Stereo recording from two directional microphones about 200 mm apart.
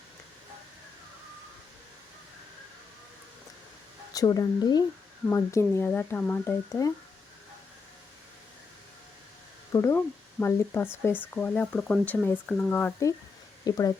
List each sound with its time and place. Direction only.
4.1 s speech: 20° left (ahead or behind)
9.7 s speech: 15° left (ahead or behind)